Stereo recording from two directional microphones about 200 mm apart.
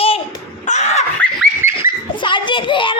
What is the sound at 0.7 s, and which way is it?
Laughter, 35° left (ahead or behind).